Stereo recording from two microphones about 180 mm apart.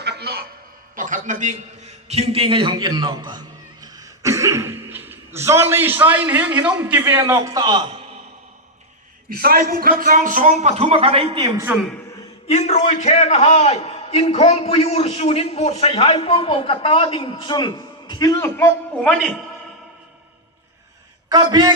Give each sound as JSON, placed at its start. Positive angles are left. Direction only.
{"t": 0.0, "sound": "music", "side_deg": -65}
{"t": 0.9, "sound": "a man's voice", "side_deg": -45}
{"t": 9.3, "sound": "a man's voice", "side_deg": -55}
{"t": 11.7, "sound": "a man's voice", "side_deg": 0}
{"t": 12.5, "sound": "a man's voice", "side_deg": 40}
{"t": 21.2, "sound": "a man's voice", "side_deg": -20}